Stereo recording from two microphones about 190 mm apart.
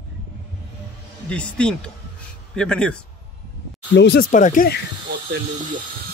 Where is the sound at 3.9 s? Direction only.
65° left (ahead or behind).